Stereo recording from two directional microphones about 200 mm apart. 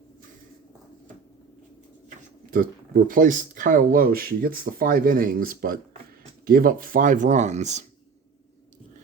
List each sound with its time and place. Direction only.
2.0 s speech: 45° right (ahead or behind)